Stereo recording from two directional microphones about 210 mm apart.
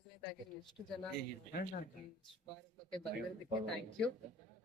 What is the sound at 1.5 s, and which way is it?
Speech, 40° left (ahead or behind).